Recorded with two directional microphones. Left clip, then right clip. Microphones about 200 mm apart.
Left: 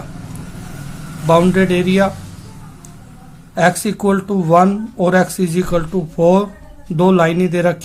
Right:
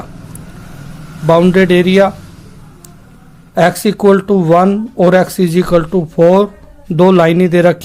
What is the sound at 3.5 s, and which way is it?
Speech, 35° right (ahead or behind).